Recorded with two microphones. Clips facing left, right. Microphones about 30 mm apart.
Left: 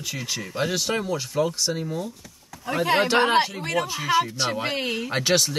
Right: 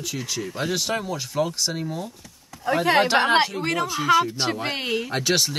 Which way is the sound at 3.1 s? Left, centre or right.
Centre.